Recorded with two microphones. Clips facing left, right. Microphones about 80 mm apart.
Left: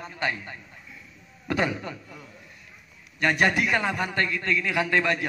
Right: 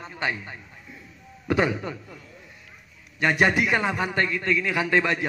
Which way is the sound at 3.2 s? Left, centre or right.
Centre.